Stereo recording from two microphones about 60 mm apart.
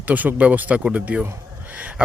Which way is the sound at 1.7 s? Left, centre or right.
Right.